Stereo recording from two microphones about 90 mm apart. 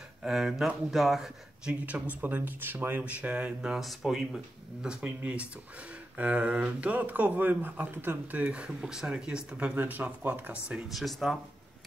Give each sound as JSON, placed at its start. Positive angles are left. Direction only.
{"t": 0.2, "sound": "speech", "side_deg": -5}
{"t": 4.8, "sound": "speech", "side_deg": -15}
{"t": 10.9, "sound": "speech", "side_deg": 0}